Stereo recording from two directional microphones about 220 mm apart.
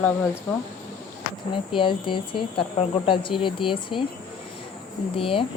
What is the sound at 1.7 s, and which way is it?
Speech, 20° left (ahead or behind).